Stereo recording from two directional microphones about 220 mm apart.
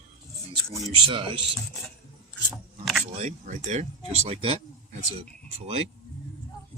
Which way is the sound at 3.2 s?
35° right (ahead or behind).